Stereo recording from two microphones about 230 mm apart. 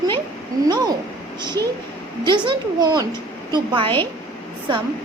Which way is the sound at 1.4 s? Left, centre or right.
Centre.